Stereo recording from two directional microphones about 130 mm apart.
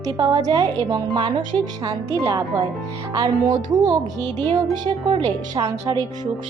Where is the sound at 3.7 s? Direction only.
30° right (ahead or behind).